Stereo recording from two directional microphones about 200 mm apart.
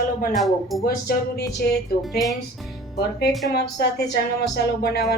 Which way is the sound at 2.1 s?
Centre (ahead or behind).